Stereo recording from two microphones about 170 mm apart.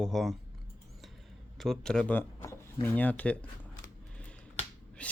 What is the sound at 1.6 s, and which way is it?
Speech, centre (ahead or behind).